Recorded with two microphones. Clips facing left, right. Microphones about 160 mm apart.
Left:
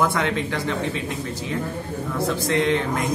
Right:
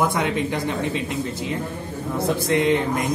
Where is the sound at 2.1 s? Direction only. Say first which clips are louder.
Right 2 dB; 20° right (ahead or behind).